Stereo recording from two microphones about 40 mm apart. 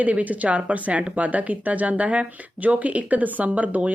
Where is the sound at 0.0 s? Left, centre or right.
Right.